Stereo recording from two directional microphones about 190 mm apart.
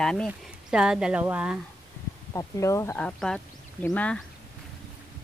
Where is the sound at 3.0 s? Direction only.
5° left (ahead or behind).